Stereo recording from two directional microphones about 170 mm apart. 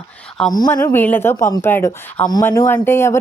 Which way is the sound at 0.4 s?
5° left (ahead or behind).